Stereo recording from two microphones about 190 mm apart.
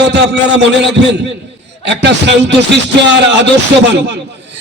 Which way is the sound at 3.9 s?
65° right (ahead or behind).